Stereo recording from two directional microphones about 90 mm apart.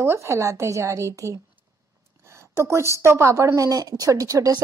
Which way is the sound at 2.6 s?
30° right (ahead or behind).